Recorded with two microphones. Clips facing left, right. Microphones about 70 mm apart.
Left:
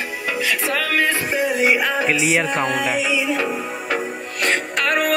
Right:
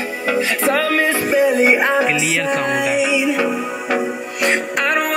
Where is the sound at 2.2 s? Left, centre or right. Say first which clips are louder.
Left 1 dB; left.